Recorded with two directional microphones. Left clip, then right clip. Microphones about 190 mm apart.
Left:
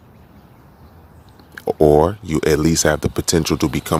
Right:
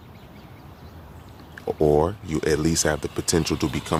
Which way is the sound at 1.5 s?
40° left (ahead or behind).